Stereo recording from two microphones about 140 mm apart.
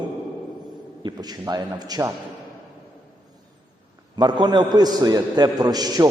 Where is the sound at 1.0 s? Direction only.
30° right (ahead or behind).